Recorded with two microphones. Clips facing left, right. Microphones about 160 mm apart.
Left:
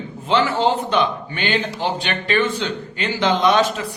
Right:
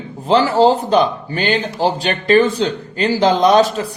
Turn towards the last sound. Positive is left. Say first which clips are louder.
# right 5 dB
turn(degrees=-35)  # may be behind; listen again after turning